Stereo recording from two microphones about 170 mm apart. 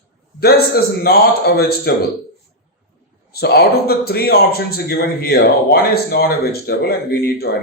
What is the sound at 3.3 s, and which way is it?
A man's voice, 70° left (ahead or behind).